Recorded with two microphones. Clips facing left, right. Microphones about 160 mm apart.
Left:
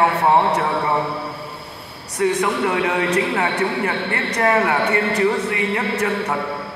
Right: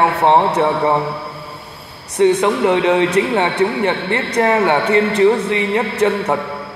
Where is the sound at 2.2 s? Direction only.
25° right (ahead or behind).